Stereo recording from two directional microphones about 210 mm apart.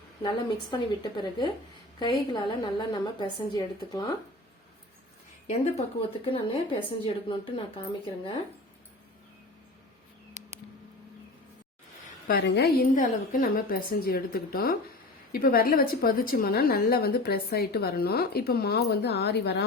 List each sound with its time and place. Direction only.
0.2 s a woman's voice: 20° left (ahead or behind)
5.5 s a woman's voice: 30° left (ahead or behind)
12.3 s a woman's voice: 45° left (ahead or behind)